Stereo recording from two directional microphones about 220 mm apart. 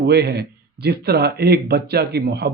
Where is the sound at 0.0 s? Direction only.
45° right (ahead or behind).